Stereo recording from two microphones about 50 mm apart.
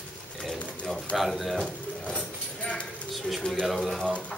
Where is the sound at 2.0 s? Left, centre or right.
Left.